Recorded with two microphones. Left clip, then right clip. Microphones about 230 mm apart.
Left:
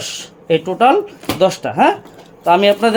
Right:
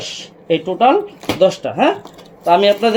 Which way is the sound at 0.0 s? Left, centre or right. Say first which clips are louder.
Left 1 dB; left.